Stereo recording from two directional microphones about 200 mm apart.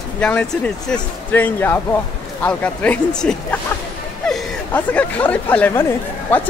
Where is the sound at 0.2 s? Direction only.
5° left (ahead or behind).